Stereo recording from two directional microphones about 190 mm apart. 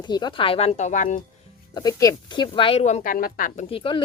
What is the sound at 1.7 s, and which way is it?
Speech, 20° left (ahead or behind).